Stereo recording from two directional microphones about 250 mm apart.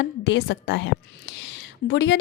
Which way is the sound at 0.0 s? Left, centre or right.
Left.